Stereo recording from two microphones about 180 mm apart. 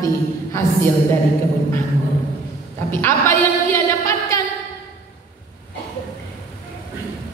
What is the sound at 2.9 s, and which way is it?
Speech, 10° left (ahead or behind).